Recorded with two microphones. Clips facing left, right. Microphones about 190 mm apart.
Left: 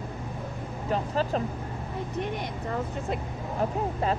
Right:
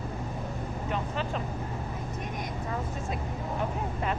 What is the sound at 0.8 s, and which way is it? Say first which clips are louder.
Speech: left 6 dB; 35° left (ahead or behind).